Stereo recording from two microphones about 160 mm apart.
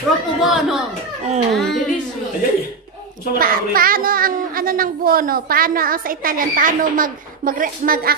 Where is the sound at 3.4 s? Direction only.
65° right (ahead or behind).